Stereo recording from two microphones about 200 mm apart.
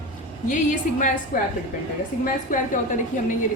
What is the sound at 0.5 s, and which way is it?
Speech, 40° left (ahead or behind).